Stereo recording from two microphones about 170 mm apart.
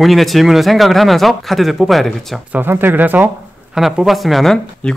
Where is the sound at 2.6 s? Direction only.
10° right (ahead or behind).